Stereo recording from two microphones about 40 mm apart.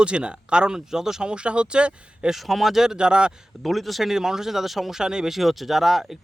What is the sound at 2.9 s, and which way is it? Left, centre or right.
Speech, right.